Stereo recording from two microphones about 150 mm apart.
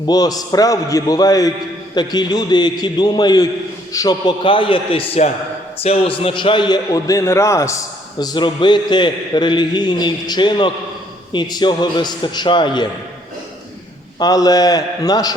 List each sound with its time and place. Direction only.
0.1 s a man's voice: 25° left (ahead or behind)
14.2 s a man's voice: 25° left (ahead or behind)